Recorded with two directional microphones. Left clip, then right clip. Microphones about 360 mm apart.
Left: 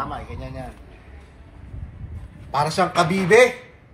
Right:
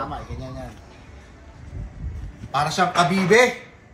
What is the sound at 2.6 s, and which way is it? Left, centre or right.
Speech, left.